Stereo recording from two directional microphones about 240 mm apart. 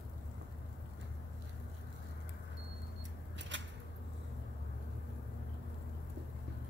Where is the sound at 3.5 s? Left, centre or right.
Right.